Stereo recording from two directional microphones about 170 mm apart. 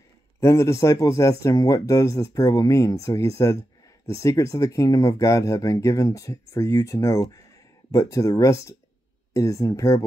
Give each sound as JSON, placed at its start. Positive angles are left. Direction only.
{"t": 0.4, "sound": "speech", "side_deg": 15}